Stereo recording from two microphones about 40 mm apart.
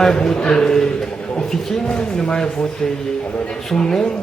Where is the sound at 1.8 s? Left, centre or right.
Left.